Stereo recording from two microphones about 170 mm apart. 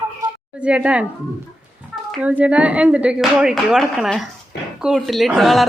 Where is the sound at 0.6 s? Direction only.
5° right (ahead or behind).